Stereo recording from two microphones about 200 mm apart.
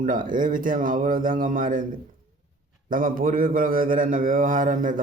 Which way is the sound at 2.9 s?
45° right (ahead or behind).